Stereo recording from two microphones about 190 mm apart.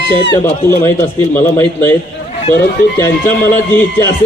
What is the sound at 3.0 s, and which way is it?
Speech, 15° left (ahead or behind).